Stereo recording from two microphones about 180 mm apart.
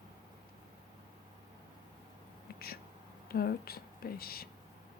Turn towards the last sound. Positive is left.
turn(degrees=55)  # may be behind; listen again after turning